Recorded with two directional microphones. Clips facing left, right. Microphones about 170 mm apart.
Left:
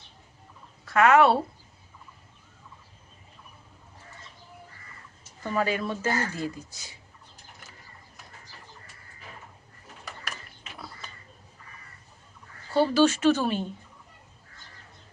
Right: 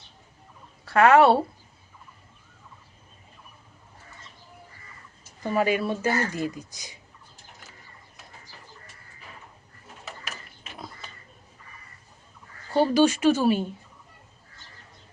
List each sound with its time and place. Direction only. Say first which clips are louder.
0.9 s speech: right 3 dB; 30° right (ahead or behind)
5.4 s speech: right 3 dB; 15° right (ahead or behind)
12.7 s speech: right 1 dB; 15° right (ahead or behind)